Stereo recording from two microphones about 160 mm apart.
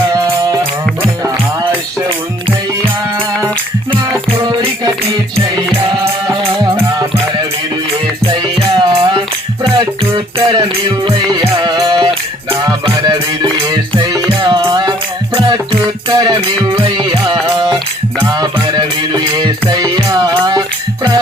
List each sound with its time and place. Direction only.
8.7 s music: 30° right (ahead or behind)
18.6 s music: 25° right (ahead or behind)